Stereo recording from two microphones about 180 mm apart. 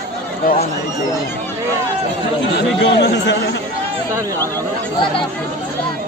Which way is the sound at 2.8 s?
75° left (ahead or behind).